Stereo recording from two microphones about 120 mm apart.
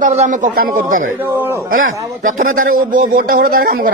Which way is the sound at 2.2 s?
90° right.